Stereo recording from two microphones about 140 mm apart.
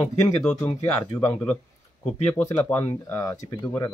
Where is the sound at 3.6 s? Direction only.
15° left (ahead or behind).